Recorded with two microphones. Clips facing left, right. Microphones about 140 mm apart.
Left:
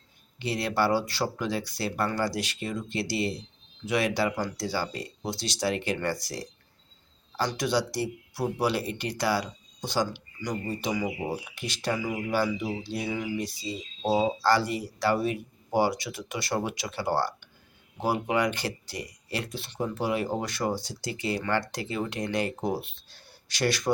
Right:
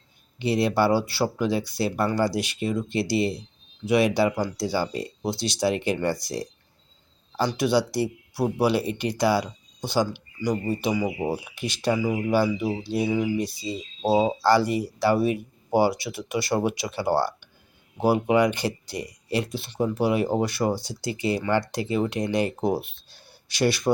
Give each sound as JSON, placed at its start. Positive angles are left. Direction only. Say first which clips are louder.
{"t": 0.3, "sound": "speech", "louder": "right 6 dB", "side_deg": -20}